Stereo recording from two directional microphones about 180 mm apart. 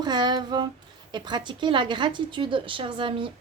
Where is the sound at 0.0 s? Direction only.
25° right (ahead or behind).